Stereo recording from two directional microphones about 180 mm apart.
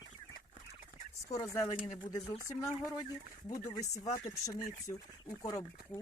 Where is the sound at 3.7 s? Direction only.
20° left (ahead or behind).